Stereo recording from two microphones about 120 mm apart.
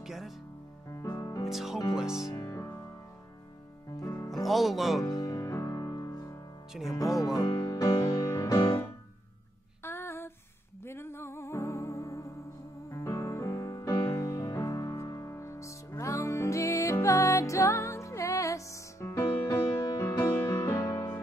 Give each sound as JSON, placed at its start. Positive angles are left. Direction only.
{"t": 0.0, "sound": "music", "side_deg": 0}
{"t": 1.1, "sound": "music", "side_deg": 25}
{"t": 1.5, "sound": "music", "side_deg": 0}
{"t": 2.3, "sound": "music", "side_deg": 25}
{"t": 3.9, "sound": "music", "side_deg": 25}
{"t": 4.3, "sound": "music", "side_deg": 0}
{"t": 5.0, "sound": "music", "side_deg": 30}
{"t": 6.7, "sound": "music", "side_deg": 0}
{"t": 7.5, "sound": "music", "side_deg": 30}
{"t": 9.8, "sound": "a sound", "side_deg": 20}
{"t": 10.9, "sound": "music", "side_deg": 20}
{"t": 20.9, "sound": "music", "side_deg": 35}